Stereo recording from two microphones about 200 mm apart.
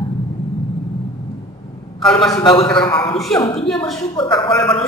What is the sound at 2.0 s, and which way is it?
Speech, 5° left (ahead or behind).